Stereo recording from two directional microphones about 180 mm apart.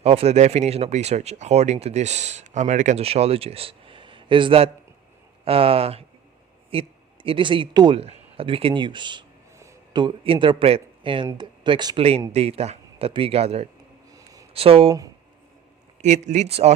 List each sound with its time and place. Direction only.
0.0 s a man's voice: 35° right (ahead or behind)
14.1 s a sound: 20° right (ahead or behind)
14.5 s speech: 30° right (ahead or behind)
16.0 s speech: 40° right (ahead or behind)